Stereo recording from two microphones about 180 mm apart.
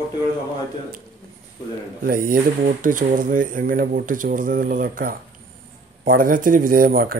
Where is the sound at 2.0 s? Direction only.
55° right (ahead or behind).